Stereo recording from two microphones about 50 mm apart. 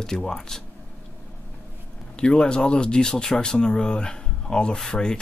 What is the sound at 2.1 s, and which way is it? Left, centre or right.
Speech, centre.